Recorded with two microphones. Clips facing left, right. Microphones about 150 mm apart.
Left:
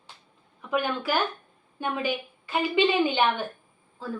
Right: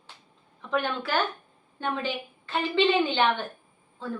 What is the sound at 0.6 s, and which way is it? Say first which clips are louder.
A woman's voice: left 1 dB; 10° left (ahead or behind).